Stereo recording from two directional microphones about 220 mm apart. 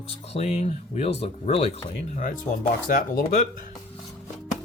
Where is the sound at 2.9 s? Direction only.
40° left (ahead or behind).